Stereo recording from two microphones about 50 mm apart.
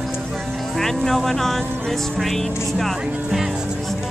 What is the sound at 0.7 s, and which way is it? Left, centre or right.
Speech, centre.